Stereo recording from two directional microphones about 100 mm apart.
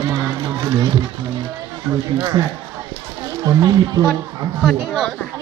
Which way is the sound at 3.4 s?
40° right (ahead or behind).